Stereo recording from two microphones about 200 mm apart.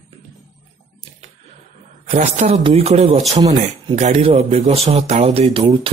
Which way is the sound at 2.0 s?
35° right (ahead or behind).